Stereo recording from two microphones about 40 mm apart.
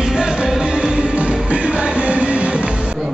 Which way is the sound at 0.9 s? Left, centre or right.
Right.